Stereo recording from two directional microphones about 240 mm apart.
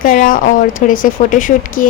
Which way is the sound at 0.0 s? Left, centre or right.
Left.